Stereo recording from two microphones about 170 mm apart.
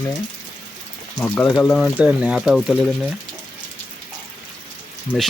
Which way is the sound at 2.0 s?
5° right (ahead or behind).